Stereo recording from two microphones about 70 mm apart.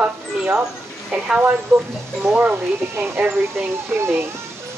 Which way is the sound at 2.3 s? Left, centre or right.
Centre.